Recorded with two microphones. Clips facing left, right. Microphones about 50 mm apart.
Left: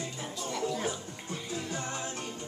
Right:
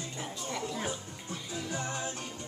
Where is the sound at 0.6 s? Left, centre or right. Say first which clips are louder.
Left 3 dB; centre.